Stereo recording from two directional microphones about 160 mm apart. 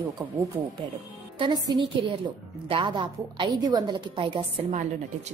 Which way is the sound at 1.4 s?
30° right (ahead or behind).